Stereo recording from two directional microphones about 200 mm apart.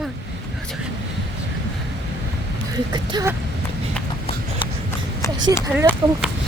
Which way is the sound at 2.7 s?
20° right (ahead or behind).